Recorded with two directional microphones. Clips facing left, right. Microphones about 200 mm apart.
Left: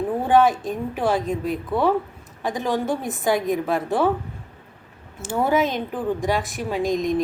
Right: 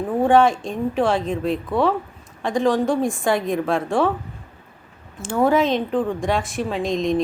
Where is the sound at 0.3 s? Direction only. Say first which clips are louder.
Right 1 dB; centre (ahead or behind).